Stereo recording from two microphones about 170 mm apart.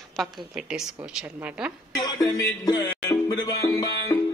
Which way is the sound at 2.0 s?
20° left (ahead or behind).